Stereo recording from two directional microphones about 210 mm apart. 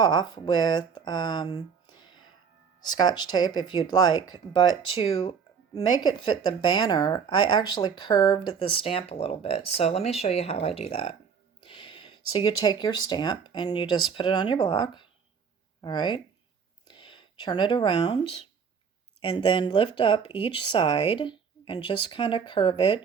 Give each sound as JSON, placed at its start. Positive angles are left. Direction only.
{"t": 0.0, "sound": "speech", "side_deg": 20}